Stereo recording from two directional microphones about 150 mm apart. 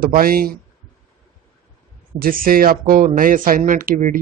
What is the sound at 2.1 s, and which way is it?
Speech, 75° right (ahead or behind).